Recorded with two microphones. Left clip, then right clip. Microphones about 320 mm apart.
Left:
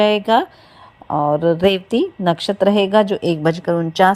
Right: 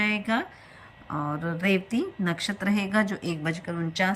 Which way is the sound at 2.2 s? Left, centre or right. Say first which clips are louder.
Left 14 dB; centre.